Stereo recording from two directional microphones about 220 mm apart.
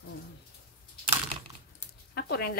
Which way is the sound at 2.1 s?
45° left (ahead or behind).